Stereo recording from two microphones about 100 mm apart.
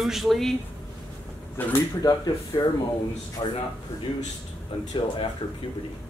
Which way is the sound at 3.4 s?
50° left (ahead or behind).